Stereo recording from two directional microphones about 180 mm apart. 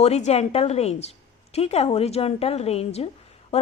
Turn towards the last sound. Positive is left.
turn(degrees=35)  # may be behind; listen again after turning